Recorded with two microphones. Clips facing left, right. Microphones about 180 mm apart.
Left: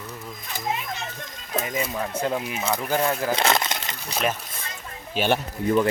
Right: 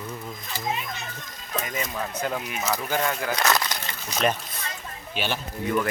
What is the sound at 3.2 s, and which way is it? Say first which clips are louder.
Crumpling: left 2 dB; 25° left (ahead or behind).